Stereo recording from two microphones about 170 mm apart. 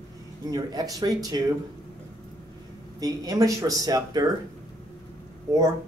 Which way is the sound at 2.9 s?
20° right (ahead or behind).